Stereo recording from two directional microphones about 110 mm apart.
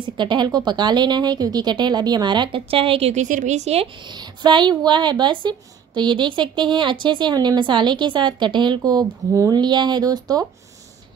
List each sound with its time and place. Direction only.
0.0 s speech: 45° right (ahead or behind); by 3.8 s 90° right
3.8 s speech: 45° right (ahead or behind)